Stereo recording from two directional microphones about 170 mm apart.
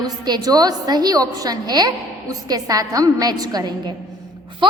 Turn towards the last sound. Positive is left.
turn(degrees=-30)  # may be behind; listen again after turning